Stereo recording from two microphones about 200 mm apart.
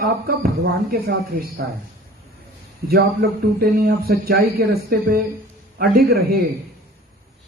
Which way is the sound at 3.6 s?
50° right (ahead or behind).